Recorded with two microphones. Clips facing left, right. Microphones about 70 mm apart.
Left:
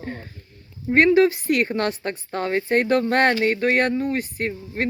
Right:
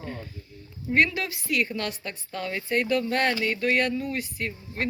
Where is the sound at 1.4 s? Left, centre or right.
Left.